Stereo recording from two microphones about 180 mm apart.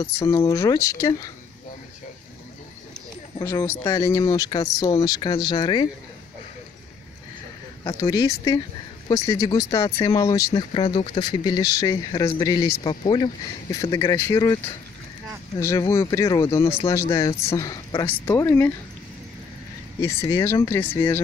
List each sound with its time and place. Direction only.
0.0 s speech: 15° left (ahead or behind)
3.3 s speech: 15° left (ahead or behind)
7.8 s speech: 20° left (ahead or behind)
15.6 s speech: 15° left (ahead or behind)
17.1 s speech: 30° left (ahead or behind)
17.4 s speech: 15° left (ahead or behind)
20.0 s speech: 15° left (ahead or behind)